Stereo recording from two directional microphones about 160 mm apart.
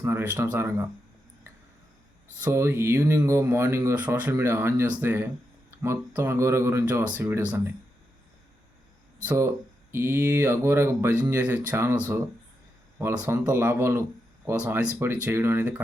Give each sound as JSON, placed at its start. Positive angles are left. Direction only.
{"t": 0.0, "sound": "speech", "side_deg": -15}
{"t": 2.4, "sound": "speech", "side_deg": -15}
{"t": 9.2, "sound": "speech", "side_deg": -15}